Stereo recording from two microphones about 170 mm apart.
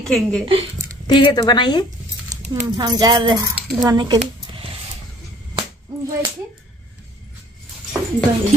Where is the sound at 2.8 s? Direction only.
25° right (ahead or behind).